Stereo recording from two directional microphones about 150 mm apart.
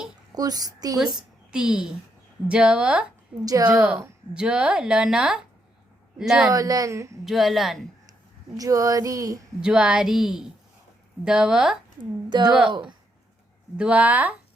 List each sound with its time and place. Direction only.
0.3 s a child's voice: 25° right (ahead or behind)
1.5 s speech: 5° right (ahead or behind)
3.4 s female singing: 25° right (ahead or behind)
4.4 s speech: 5° right (ahead or behind)
6.5 s female singing: 25° right (ahead or behind)
7.3 s speech: centre (ahead or behind)
8.5 s female singing: 25° right (ahead or behind)
9.6 s speech: 5° right (ahead or behind)
13.7 s speech: 10° right (ahead or behind)